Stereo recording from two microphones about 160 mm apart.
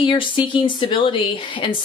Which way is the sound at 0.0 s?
30° left (ahead or behind).